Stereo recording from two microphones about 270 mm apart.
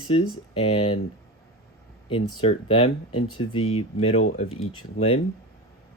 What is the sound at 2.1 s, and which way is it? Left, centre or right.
Speech, centre.